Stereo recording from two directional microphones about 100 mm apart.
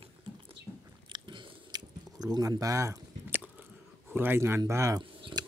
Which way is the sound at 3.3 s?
20° right (ahead or behind).